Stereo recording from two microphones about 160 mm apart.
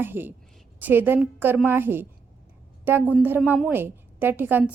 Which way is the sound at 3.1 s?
10° right (ahead or behind).